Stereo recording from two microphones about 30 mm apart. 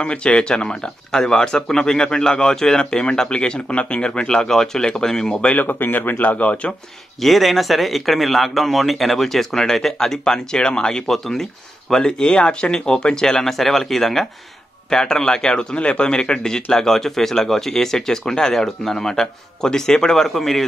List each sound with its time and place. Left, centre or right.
0.0 s speech: left; by 2.8 s centre
2.8 s speech: left
4.4 s speech: left
5.6 s speech: left
6.1 s speech: left
7.2 s speech: centre; by 11.1 s left
11.1 s speech: centre
11.9 s speech: left
13.5 s speech: centre
14.9 s speech: left
15.7 s speech: left
16.7 s speech: centre
20.2 s speech: centre